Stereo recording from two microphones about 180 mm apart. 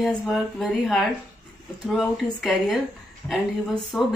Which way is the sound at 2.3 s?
Centre (ahead or behind).